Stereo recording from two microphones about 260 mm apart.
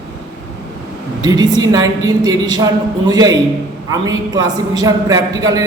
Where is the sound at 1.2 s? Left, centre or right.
Centre.